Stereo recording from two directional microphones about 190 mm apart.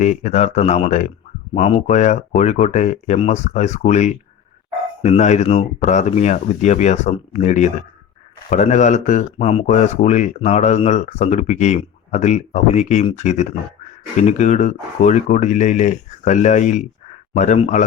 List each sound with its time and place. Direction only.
0.0 s speech: 40° left (ahead or behind)